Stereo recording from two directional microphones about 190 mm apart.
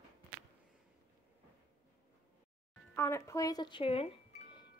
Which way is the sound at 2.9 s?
15° left (ahead or behind).